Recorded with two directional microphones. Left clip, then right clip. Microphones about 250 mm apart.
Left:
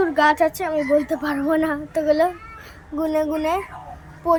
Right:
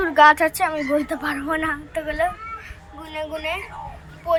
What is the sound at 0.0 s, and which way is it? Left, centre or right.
A woman's voice, centre.